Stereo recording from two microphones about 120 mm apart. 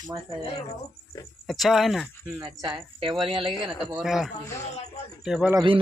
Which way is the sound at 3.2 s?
45° right (ahead or behind).